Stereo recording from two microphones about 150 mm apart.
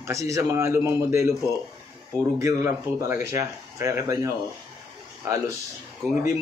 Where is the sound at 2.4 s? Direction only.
20° right (ahead or behind).